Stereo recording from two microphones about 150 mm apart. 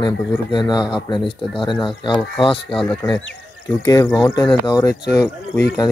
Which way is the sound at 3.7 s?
20° left (ahead or behind).